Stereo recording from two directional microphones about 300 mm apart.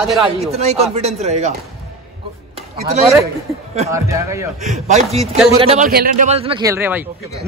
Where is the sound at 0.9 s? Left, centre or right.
Right.